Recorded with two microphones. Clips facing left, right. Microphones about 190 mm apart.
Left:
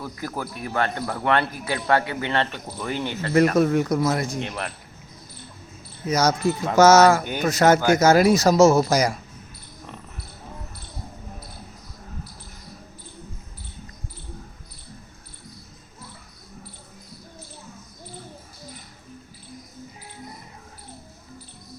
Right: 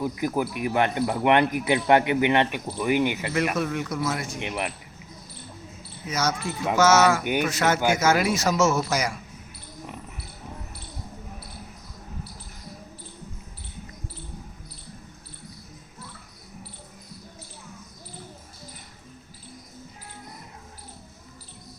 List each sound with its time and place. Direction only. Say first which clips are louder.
0.0 s speech: right 6 dB; 15° right (ahead or behind)
3.5 s speech: left 8 dB; 40° left (ahead or behind)
4.4 s speech: even; 15° right (ahead or behind)
6.1 s speech: left 7 dB; 40° left (ahead or behind)